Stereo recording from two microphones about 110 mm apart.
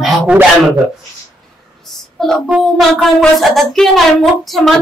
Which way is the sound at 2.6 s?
Centre (ahead or behind).